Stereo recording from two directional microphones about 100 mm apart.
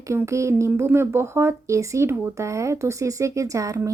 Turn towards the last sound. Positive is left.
turn(degrees=-35)  # may be behind; listen again after turning